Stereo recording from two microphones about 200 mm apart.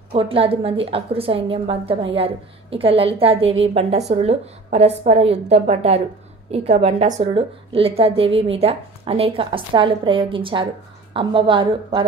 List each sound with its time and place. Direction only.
0.1 s a woman's voice: 25° right (ahead or behind)